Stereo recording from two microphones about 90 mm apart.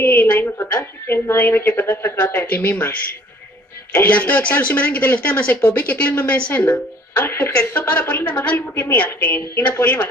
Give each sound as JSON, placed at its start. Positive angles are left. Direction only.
{"t": 0.0, "sound": "a woman's voice", "side_deg": 25}
{"t": 3.9, "sound": "speech", "side_deg": 20}